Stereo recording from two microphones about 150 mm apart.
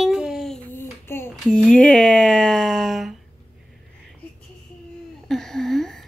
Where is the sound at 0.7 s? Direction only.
15° left (ahead or behind).